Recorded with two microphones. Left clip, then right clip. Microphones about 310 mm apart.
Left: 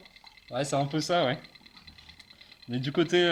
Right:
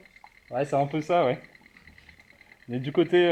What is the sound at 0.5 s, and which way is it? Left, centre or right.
Speech, left.